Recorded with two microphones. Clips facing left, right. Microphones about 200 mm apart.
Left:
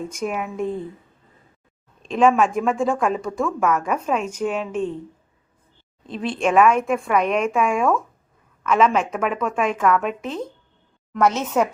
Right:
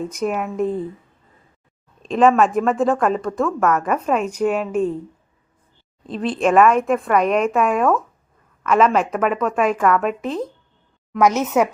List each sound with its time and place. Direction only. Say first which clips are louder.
0.2 s a woman's voice: right 4 dB; centre (ahead or behind)
2.0 s a woman's voice: right 2 dB; centre (ahead or behind)
6.0 s a woman's voice: right 3 dB; centre (ahead or behind)